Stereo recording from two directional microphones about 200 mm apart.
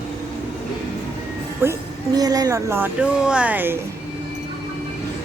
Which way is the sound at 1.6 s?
10° right (ahead or behind).